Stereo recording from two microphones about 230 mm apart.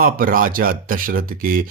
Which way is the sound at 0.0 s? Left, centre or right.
Right.